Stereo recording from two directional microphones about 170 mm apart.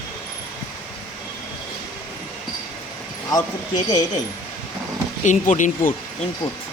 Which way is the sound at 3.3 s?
20° left (ahead or behind).